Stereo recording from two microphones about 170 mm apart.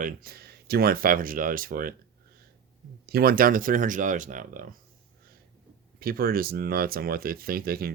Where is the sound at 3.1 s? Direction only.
65° right (ahead or behind).